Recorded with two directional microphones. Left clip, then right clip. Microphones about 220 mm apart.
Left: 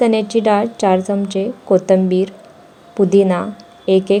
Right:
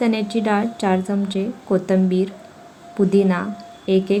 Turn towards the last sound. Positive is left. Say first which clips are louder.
# left 5 dB
turn(degrees=20)  # may be behind; listen again after turning